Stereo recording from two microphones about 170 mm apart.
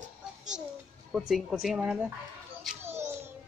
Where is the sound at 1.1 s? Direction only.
5° right (ahead or behind).